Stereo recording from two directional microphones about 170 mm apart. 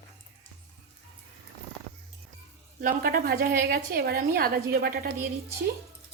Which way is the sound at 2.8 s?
60° right (ahead or behind).